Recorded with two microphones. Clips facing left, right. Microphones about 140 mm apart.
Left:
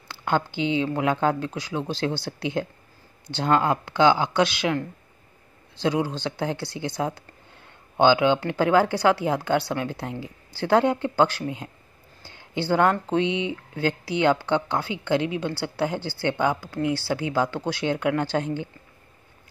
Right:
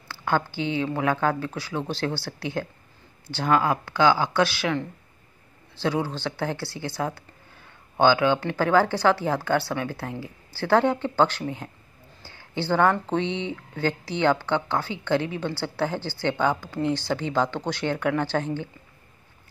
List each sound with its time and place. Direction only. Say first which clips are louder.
0.1 s a woman's voice: even; 20° left (ahead or behind)
5.8 s a woman's voice: left 2 dB; 15° left (ahead or behind)
12.2 s a sound: left 1 dB; 15° left (ahead or behind)
13.1 s a woman's voice: left 3 dB; 10° left (ahead or behind)